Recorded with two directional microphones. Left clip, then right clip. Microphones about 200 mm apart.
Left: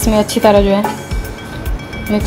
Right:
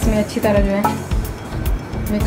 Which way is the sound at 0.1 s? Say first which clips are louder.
Left 8 dB; 35° left (ahead or behind).